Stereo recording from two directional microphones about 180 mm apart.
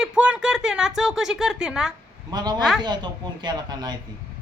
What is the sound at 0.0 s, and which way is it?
Speech, 5° right (ahead or behind).